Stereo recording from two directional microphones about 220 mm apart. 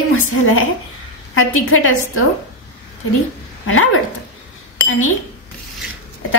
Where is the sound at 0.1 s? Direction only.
70° left (ahead or behind).